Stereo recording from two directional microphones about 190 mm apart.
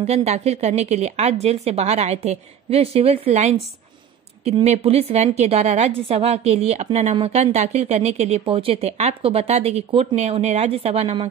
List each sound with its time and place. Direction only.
0.0 s a woman's voice: 35° right (ahead or behind)
4.6 s a woman's voice: 35° right (ahead or behind)